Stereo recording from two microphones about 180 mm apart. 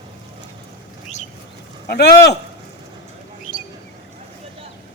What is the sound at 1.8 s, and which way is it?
Speech, 65° left (ahead or behind).